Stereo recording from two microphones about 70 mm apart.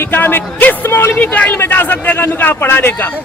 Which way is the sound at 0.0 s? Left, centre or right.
Left.